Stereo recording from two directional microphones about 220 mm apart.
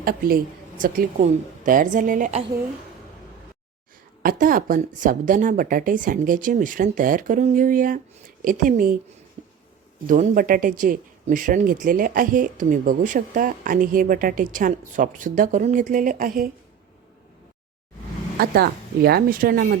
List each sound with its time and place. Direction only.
0.0 s speech: 40° right (ahead or behind)
4.2 s speech: 40° right (ahead or behind)
9.4 s a sound: 30° right (ahead or behind)
10.1 s speech: 40° right (ahead or behind)
18.3 s a woman's voice: 45° right (ahead or behind)